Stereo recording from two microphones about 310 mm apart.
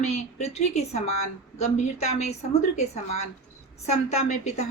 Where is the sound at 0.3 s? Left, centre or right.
Left.